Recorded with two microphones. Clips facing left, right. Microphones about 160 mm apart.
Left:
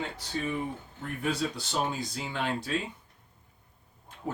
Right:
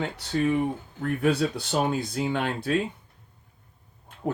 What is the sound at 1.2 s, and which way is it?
Speech, 65° right (ahead or behind).